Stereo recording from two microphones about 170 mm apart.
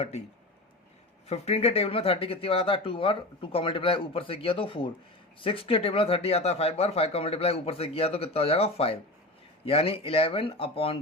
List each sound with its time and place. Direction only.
1.3 s speech: 40° left (ahead or behind)